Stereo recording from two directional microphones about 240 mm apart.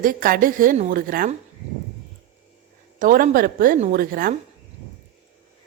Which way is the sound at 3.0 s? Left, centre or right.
Right.